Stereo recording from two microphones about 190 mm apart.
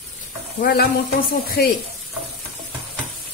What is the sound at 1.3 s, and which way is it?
Speech, 55° left (ahead or behind).